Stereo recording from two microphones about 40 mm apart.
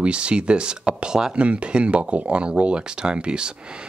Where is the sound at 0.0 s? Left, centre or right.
Right.